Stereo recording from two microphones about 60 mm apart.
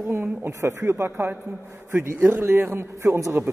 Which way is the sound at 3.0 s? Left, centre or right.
Right.